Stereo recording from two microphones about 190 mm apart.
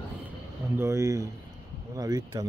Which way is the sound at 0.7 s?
15° right (ahead or behind).